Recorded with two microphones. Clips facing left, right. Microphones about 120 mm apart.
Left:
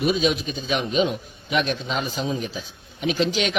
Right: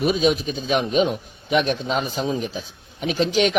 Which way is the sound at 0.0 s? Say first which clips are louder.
Right 2 dB; 40° right (ahead or behind).